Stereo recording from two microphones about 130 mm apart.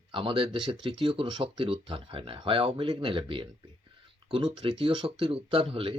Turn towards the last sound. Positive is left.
turn(degrees=-45)  # may be behind; listen again after turning